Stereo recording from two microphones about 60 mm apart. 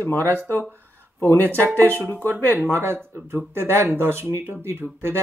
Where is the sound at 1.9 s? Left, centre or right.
Left.